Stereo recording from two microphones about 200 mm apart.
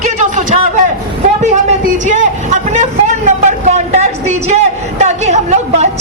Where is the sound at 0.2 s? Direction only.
40° right (ahead or behind).